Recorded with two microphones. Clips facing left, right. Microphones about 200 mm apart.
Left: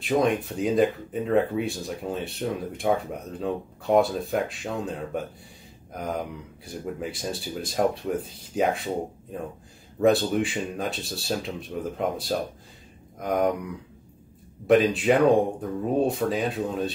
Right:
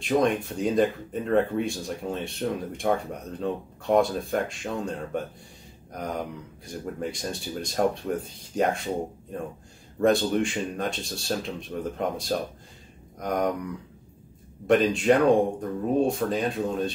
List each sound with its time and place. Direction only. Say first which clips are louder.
0.0 s speech: even; centre (ahead or behind)
9.9 s speech: left 1 dB; 5° left (ahead or behind)
14.7 s speech: left 1 dB; 5° left (ahead or behind)